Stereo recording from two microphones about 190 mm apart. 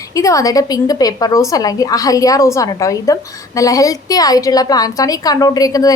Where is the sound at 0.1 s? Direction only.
15° left (ahead or behind).